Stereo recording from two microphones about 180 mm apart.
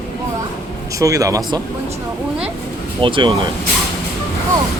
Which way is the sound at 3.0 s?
30° right (ahead or behind).